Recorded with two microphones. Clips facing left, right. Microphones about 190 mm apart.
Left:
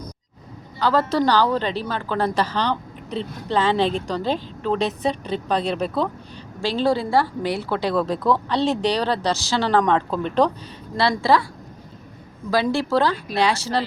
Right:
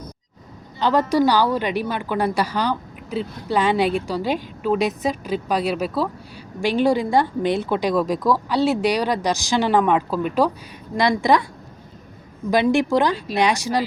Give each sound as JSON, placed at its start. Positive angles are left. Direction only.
{"t": 0.8, "sound": "a woman's voice", "side_deg": -20}
{"t": 12.5, "sound": "a woman's voice", "side_deg": -20}